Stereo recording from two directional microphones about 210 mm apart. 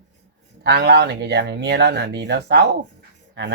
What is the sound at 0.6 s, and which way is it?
Speech, 50° right (ahead or behind).